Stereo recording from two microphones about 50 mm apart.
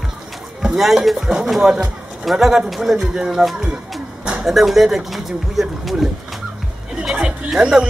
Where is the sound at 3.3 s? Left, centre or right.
Centre.